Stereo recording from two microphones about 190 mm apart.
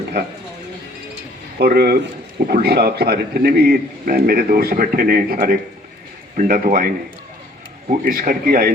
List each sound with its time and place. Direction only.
1.5 s a man's voice: 55° right (ahead or behind)